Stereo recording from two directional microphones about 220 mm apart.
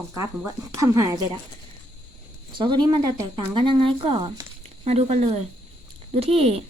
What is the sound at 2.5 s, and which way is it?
Speech, 20° right (ahead or behind).